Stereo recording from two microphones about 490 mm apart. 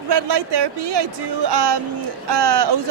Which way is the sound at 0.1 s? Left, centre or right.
Right.